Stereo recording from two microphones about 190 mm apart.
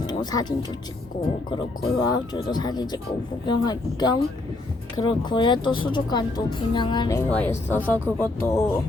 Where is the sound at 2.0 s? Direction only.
20° left (ahead or behind).